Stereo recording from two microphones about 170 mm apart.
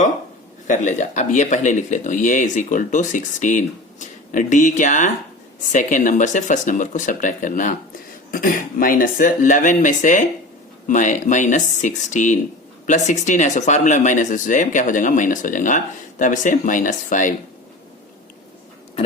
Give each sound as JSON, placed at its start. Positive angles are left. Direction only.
{"t": 0.7, "sound": "speech", "side_deg": 45}